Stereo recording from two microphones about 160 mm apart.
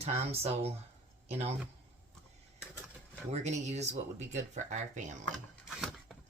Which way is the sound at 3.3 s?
45° right (ahead or behind).